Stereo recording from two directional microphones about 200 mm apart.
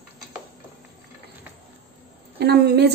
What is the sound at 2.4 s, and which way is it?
Speech, 55° right (ahead or behind).